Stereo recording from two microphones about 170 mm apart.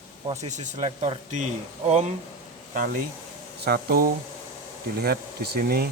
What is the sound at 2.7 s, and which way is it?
Speech, 55° right (ahead or behind).